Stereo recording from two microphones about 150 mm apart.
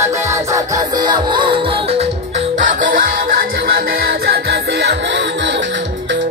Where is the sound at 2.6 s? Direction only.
65° right (ahead or behind); by 4.9 s 90° right.